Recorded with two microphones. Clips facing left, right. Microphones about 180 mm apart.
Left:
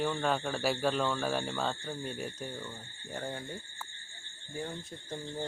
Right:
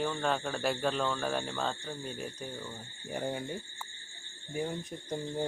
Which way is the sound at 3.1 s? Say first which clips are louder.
Right 4 dB; 20° right (ahead or behind).